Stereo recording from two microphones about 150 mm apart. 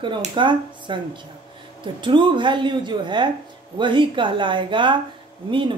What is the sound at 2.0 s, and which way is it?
A woman's voice, 30° right (ahead or behind).